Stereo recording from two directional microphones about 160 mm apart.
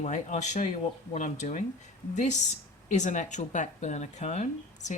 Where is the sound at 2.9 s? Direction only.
50° left (ahead or behind).